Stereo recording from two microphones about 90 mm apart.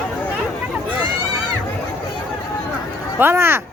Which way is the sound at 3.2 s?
25° right (ahead or behind).